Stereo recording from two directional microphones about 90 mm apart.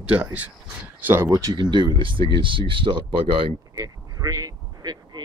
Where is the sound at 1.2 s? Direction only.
40° right (ahead or behind).